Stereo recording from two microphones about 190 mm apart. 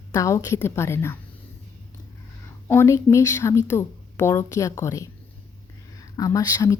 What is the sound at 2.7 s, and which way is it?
A woman's voice, 15° left (ahead or behind).